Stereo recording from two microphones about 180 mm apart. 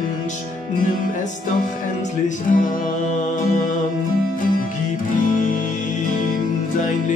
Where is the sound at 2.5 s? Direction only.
45° left (ahead or behind).